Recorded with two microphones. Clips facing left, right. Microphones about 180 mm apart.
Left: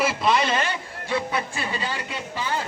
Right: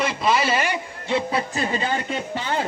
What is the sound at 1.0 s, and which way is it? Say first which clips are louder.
Music: right 3 dB; 25° right (ahead or behind).